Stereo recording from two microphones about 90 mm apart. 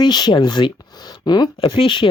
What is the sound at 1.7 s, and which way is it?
Speech, 65° left (ahead or behind).